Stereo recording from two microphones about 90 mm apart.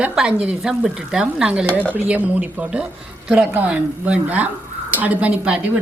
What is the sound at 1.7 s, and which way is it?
Speech, 15° left (ahead or behind).